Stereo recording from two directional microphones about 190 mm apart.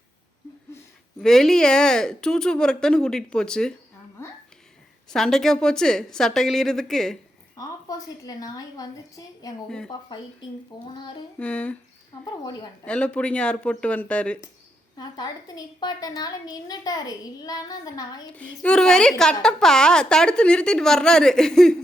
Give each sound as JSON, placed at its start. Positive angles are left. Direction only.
{"t": 1.2, "sound": "speech", "side_deg": 0}
{"t": 5.1, "sound": "speech", "side_deg": 0}
{"t": 7.5, "sound": "a woman's voice", "side_deg": 20}
{"t": 9.6, "sound": "speech", "side_deg": 5}
{"t": 10.7, "sound": "a woman's voice", "side_deg": 25}
{"t": 11.3, "sound": "speech", "side_deg": 5}
{"t": 12.8, "sound": "speech", "side_deg": 5}
{"t": 14.9, "sound": "a woman's voice", "side_deg": 20}
{"t": 18.3, "sound": "speech", "side_deg": 5}